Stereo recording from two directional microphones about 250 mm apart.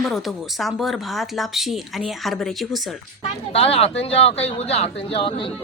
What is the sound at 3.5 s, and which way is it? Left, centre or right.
Speech, left.